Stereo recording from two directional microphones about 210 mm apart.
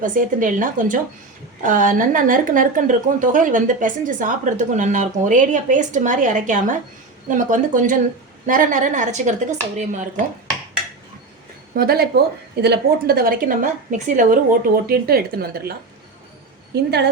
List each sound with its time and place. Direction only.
0.0 s a woman's voice: 40° right (ahead or behind)
11.7 s a woman's voice: 45° right (ahead or behind)
16.7 s a woman's voice: 50° right (ahead or behind)